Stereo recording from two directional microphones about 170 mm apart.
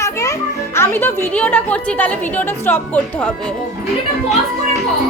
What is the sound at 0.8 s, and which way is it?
A woman's voice, 15° left (ahead or behind).